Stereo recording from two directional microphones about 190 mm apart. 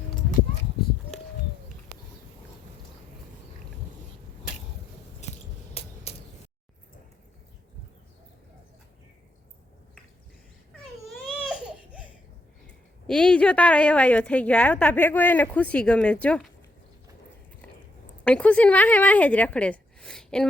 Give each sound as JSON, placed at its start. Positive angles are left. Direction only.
{"t": 5.2, "sound": "a sound", "side_deg": 35}
{"t": 11.0, "sound": "baby cry", "side_deg": 0}
{"t": 12.6, "sound": "a woman's voice", "side_deg": 5}
{"t": 18.3, "sound": "speech", "side_deg": 5}